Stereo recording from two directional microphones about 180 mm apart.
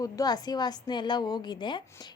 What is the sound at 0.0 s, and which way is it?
A woman's voice, 20° left (ahead or behind).